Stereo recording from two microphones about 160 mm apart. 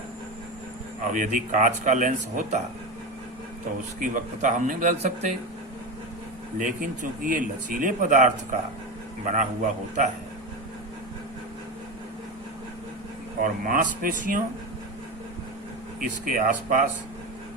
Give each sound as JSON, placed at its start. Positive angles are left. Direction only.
{"t": 1.1, "sound": "speech", "side_deg": -55}
{"t": 4.0, "sound": "speech", "side_deg": -55}
{"t": 6.6, "sound": "speech", "side_deg": -55}
{"t": 13.4, "sound": "speech", "side_deg": -60}
{"t": 16.0, "sound": "speech", "side_deg": -55}